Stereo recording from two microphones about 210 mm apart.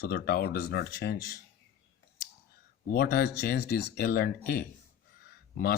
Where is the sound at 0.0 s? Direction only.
45° left (ahead or behind).